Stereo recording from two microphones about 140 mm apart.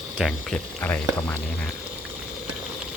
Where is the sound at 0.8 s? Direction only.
15° left (ahead or behind).